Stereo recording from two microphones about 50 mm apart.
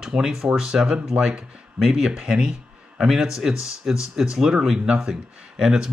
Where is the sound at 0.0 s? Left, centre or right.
Centre.